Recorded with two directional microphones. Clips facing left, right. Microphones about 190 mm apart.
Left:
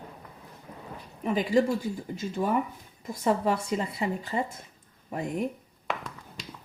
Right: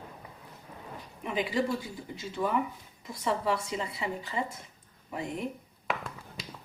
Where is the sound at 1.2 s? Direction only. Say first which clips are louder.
Left 6 dB; 45° left (ahead or behind).